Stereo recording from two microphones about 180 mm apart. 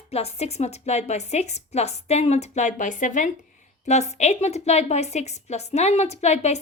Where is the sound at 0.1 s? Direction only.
35° left (ahead or behind).